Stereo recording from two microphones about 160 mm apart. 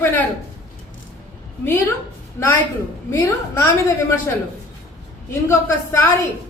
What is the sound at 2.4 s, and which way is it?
Speech, 20° left (ahead or behind).